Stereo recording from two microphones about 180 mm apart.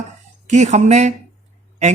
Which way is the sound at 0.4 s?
40° right (ahead or behind).